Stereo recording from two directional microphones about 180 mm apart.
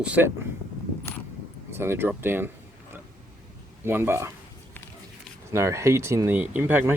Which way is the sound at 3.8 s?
10° right (ahead or behind).